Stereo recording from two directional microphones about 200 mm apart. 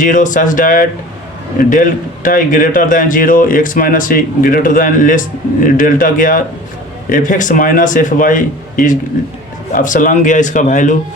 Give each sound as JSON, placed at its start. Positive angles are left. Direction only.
{"t": 0.0, "sound": "a man's voice", "side_deg": 40}